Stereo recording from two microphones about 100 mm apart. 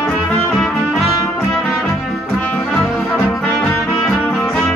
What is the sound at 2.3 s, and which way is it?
Brass instrument, 15° left (ahead or behind).